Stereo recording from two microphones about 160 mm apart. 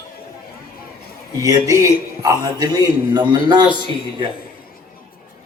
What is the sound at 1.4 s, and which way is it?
A man's voice, 20° right (ahead or behind).